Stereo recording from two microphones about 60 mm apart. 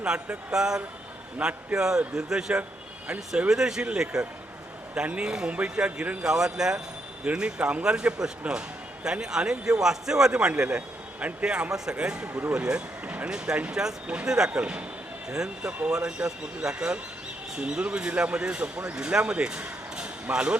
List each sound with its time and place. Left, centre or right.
0.0 s a man's voice: centre
12.3 s speech: right
12.5 s speech: centre